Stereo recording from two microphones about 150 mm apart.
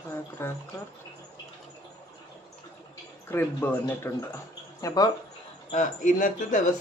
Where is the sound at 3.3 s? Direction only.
15° left (ahead or behind).